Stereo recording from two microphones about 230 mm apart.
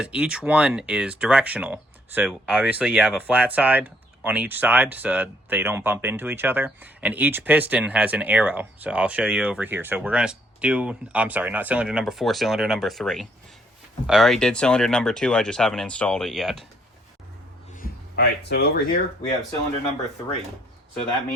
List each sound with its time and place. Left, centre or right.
0.0 s speech: centre
17.7 s speech: left